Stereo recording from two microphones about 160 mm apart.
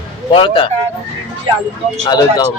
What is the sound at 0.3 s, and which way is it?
Speech, 30° left (ahead or behind).